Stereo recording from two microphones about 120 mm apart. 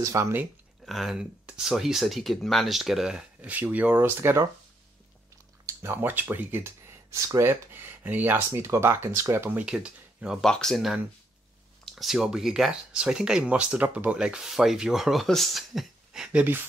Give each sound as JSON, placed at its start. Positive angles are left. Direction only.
{"t": 0.0, "sound": "speech", "side_deg": -25}
{"t": 0.8, "sound": "speech", "side_deg": 0}
{"t": 5.7, "sound": "speech", "side_deg": -20}
{"t": 10.4, "sound": "speech", "side_deg": 5}